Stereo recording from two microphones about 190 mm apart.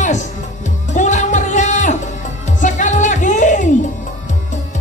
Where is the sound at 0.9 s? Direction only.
40° left (ahead or behind).